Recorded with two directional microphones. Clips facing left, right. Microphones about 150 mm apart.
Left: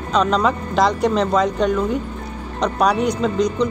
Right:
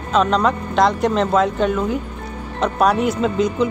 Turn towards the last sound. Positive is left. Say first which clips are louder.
# even
turn(degrees=-5)  # may be behind; listen again after turning